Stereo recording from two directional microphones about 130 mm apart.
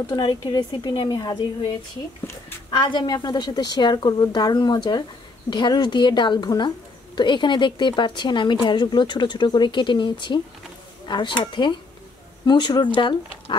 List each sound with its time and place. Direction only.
0.1 s speech: 35° left (ahead or behind)